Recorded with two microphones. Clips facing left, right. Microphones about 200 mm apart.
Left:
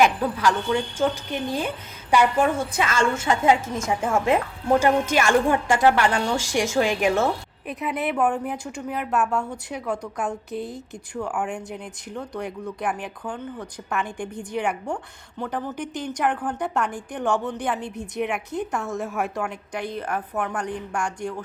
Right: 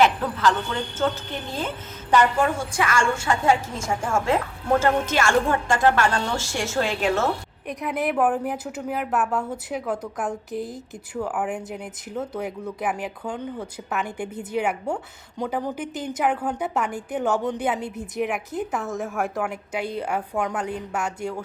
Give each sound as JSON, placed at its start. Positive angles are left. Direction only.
{"t": 0.0, "sound": "a woman's voice", "side_deg": 10}
{"t": 2.7, "sound": "a woman's voice", "side_deg": 25}
{"t": 7.7, "sound": "a woman's voice", "side_deg": 0}